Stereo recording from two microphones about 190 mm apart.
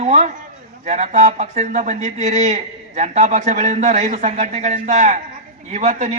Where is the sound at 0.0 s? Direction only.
35° right (ahead or behind).